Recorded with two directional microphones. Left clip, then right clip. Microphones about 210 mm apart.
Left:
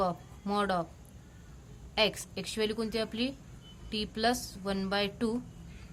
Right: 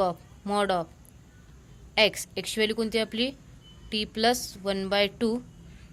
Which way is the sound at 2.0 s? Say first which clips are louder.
Right 6 dB; 20° right (ahead or behind).